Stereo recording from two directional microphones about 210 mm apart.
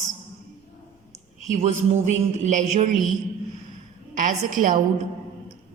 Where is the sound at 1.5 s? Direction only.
30° right (ahead or behind).